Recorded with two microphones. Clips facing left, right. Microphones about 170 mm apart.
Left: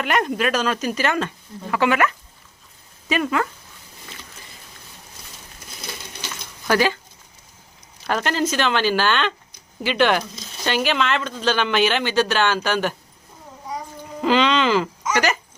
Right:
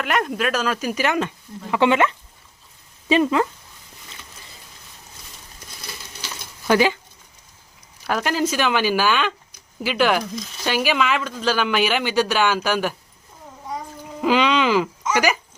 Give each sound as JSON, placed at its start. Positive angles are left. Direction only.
{"t": 0.0, "sound": "speech", "side_deg": 0}
{"t": 6.7, "sound": "speech", "side_deg": -15}
{"t": 8.0, "sound": "speech", "side_deg": -5}
{"t": 14.2, "sound": "speech", "side_deg": -10}